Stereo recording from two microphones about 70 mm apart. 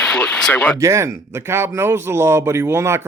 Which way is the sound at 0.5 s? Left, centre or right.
Left.